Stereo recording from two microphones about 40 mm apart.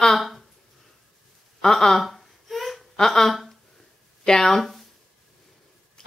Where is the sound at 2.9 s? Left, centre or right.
Centre.